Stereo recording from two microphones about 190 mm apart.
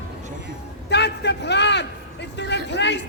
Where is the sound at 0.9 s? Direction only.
60° left (ahead or behind).